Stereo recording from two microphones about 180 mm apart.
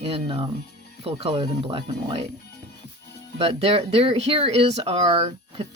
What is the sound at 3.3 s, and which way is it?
Speech, 35° right (ahead or behind).